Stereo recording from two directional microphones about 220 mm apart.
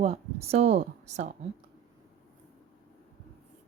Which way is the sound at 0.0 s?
30° right (ahead or behind).